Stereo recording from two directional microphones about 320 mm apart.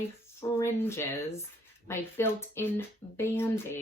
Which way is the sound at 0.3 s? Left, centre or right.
Centre.